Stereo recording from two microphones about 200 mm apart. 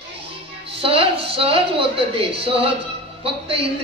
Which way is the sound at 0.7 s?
30° right (ahead or behind).